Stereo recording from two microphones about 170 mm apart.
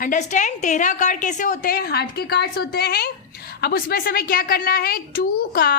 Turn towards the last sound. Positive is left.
turn(degrees=60)  # may be behind; listen again after turning